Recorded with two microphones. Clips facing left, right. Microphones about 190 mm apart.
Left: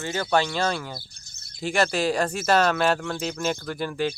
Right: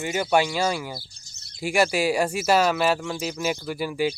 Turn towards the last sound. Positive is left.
turn(degrees=-10)  # may be behind; listen again after turning